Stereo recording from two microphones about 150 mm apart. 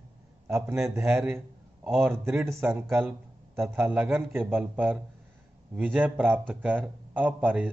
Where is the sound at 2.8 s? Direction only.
5° right (ahead or behind).